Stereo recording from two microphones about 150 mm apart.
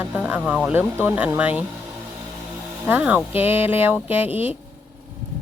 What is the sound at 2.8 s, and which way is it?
Speech, 10° right (ahead or behind).